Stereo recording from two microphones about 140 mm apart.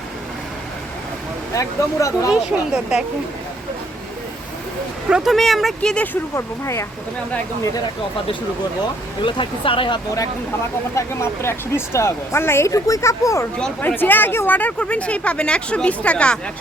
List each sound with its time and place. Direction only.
1.5 s speech: 25° left (ahead or behind)
2.3 s speech: 5° right (ahead or behind)
5.0 s speech: 5° right (ahead or behind)
6.3 s speech: 20° left (ahead or behind)
9.2 s speech: 40° left (ahead or behind)
10.9 s speech: 20° left (ahead or behind)
13.6 s speech: 10° left (ahead or behind)